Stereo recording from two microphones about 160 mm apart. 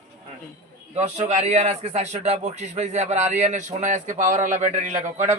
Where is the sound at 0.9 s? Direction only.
45° right (ahead or behind).